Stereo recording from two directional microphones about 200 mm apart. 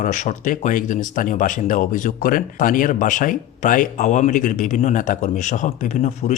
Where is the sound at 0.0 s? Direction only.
40° left (ahead or behind).